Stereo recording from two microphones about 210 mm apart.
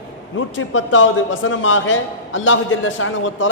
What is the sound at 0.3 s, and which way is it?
A man's voice, 65° left (ahead or behind).